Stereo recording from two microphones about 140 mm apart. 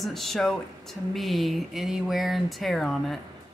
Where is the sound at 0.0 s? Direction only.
Centre (ahead or behind).